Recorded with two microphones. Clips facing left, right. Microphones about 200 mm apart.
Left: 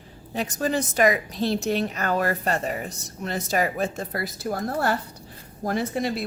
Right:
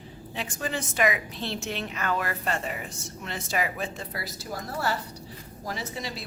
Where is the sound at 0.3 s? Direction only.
40° left (ahead or behind).